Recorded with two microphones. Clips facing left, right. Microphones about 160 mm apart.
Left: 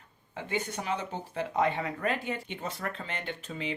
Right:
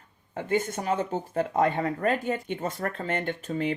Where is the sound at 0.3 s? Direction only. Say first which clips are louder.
Right 6 dB; 45° right (ahead or behind).